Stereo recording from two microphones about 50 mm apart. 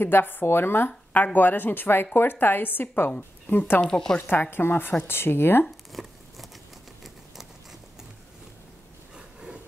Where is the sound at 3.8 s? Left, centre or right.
Centre.